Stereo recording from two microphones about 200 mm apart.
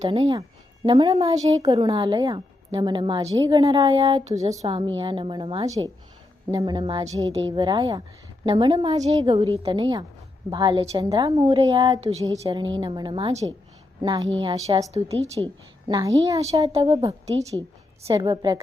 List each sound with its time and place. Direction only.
0.2 s a woman's voice: 15° right (ahead or behind)
17.2 s a woman's voice: 30° right (ahead or behind)
18.1 s a woman's voice: 20° right (ahead or behind)